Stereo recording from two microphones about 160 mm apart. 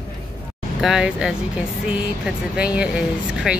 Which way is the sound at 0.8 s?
5° right (ahead or behind).